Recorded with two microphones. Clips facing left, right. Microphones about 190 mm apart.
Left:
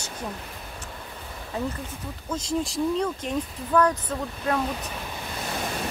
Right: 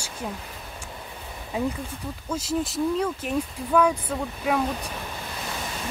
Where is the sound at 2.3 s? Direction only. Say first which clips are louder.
Even; 5° right (ahead or behind).